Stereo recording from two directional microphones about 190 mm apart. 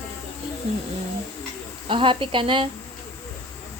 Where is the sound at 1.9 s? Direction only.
25° right (ahead or behind).